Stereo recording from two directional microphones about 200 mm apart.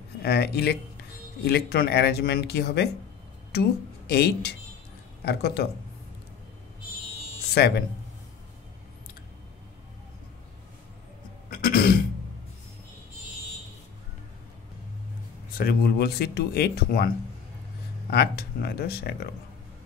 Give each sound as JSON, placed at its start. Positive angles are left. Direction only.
{"t": 0.2, "sound": "speech", "side_deg": 55}
{"t": 4.1, "sound": "speech", "side_deg": 55}
{"t": 7.5, "sound": "speech", "side_deg": 55}
{"t": 11.5, "sound": "throat clearing", "side_deg": 50}
{"t": 15.5, "sound": "speech", "side_deg": 50}
{"t": 18.1, "sound": "speech", "side_deg": 50}